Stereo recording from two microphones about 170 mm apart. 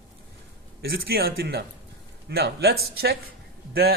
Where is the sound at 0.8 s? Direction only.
65° right (ahead or behind).